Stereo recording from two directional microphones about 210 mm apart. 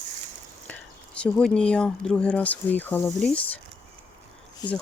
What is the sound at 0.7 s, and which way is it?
Speech, 5° left (ahead or behind).